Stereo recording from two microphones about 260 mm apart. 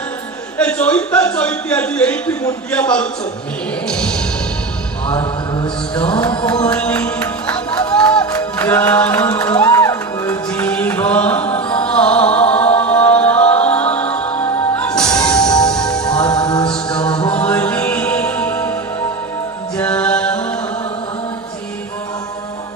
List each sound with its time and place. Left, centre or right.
0.6 s a man's voice: centre
3.8 s music: centre
5.1 s a sound: centre
6.6 s music: centre
15.0 s music: centre
15.3 s music: centre
16.1 s music: centre
16.6 s mantra: centre
17.0 s a sound: centre
17.3 s music: centre
19.8 s music: centre